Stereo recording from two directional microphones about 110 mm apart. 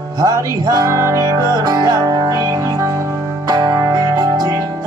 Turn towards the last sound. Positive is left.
turn(degrees=-40)  # may be behind; listen again after turning